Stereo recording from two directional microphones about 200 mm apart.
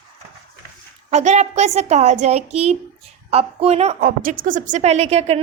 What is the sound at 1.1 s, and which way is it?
A woman's voice, 35° right (ahead or behind).